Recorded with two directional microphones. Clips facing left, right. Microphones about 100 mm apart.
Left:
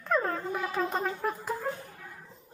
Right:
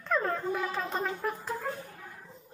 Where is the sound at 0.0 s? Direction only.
15° left (ahead or behind).